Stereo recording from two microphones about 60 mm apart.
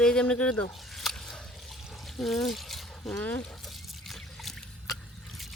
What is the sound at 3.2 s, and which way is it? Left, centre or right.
Speech, left.